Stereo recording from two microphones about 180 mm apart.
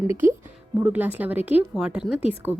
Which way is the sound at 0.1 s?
15° right (ahead or behind).